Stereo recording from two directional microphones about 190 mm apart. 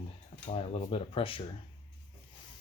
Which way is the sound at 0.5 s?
30° left (ahead or behind).